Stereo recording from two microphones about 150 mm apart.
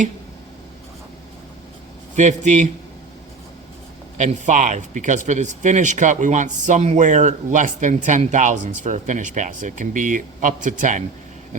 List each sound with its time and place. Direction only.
2.1 s a man's voice: 55° right (ahead or behind)
4.2 s speech: 55° right (ahead or behind)